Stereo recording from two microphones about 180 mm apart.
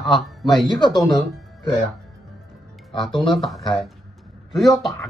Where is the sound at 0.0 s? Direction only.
Centre (ahead or behind).